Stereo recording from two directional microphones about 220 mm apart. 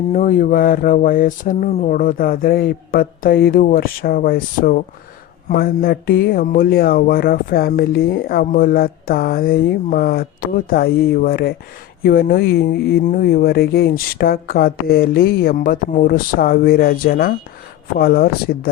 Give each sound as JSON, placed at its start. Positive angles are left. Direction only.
{"t": 0.1, "sound": "speech", "side_deg": 35}